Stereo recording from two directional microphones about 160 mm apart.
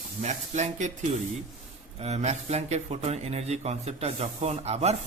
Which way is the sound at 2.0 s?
45° right (ahead or behind).